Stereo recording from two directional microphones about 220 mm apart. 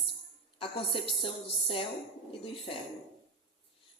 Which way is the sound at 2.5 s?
25° left (ahead or behind).